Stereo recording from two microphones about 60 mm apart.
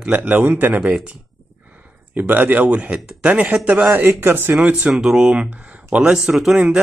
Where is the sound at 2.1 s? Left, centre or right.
Right.